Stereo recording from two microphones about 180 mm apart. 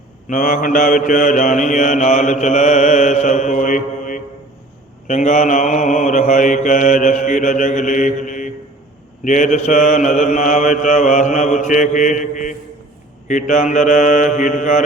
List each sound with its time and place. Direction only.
0.3 s mantra: 50° left (ahead or behind)